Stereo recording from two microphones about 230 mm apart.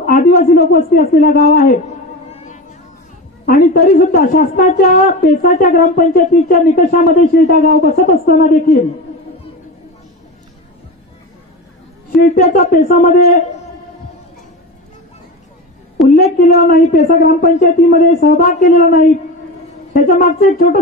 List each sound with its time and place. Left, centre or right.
0.0 s a woman's voice: left
2.3 s a sound: left
3.4 s a woman's voice: left
12.2 s a woman's voice: left
16.1 s a woman's voice: left